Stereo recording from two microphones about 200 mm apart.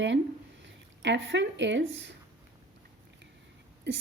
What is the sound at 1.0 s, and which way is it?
A woman's voice, 65° right (ahead or behind).